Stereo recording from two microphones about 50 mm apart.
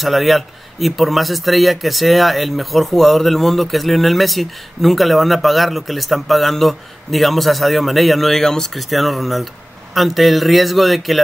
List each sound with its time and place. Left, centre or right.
0.0 s speech: centre